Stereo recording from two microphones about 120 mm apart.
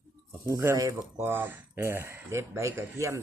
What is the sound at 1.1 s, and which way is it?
Speech, 15° right (ahead or behind).